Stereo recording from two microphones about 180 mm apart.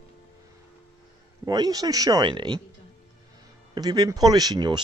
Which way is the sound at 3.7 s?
20° right (ahead or behind).